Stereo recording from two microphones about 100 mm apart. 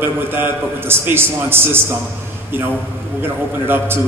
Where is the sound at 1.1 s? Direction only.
20° right (ahead or behind).